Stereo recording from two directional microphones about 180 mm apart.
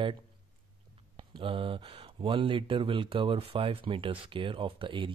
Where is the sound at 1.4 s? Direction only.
30° right (ahead or behind).